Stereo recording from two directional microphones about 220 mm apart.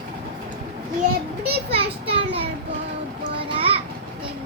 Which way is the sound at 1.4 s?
45° right (ahead or behind).